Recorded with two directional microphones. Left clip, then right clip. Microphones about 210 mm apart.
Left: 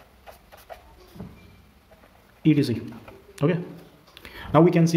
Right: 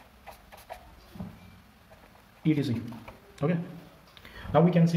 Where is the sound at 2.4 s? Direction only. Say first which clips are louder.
Left 7 dB; 50° left (ahead or behind).